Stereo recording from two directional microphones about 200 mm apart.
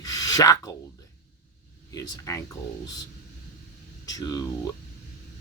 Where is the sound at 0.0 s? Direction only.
20° left (ahead or behind).